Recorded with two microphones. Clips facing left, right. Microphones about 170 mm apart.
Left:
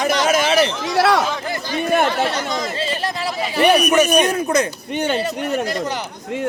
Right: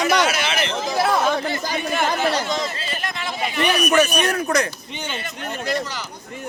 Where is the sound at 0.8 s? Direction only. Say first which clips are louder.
Left 4 dB; 75° left (ahead or behind).